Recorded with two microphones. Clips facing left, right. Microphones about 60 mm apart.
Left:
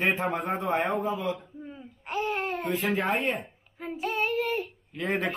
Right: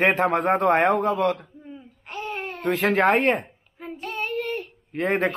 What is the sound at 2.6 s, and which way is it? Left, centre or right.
Speech, right.